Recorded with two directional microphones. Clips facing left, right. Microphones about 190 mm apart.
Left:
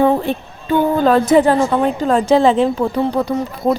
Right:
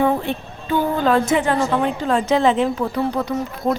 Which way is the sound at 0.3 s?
35° left (ahead or behind).